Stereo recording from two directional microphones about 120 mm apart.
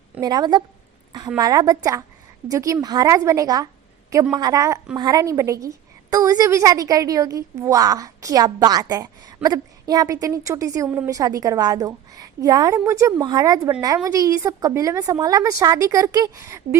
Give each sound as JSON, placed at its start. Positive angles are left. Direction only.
{"t": 0.2, "sound": "a woman's voice", "side_deg": -35}